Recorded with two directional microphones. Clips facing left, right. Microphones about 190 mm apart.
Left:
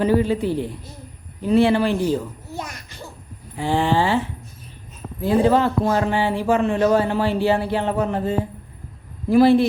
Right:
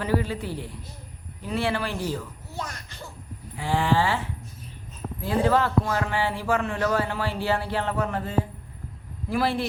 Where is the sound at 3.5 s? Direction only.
25° left (ahead or behind).